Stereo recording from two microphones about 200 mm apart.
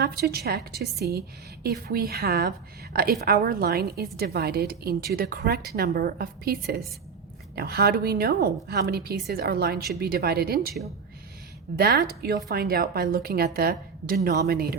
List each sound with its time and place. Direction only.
0.0 s a woman's voice: 50° right (ahead or behind)
11.8 s a woman's voice: 50° right (ahead or behind)